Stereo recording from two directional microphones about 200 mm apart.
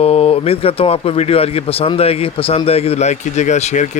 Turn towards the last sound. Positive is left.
turn(degrees=35)  # may be behind; listen again after turning